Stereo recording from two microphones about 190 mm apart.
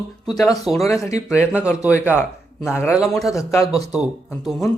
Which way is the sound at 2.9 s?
Centre (ahead or behind).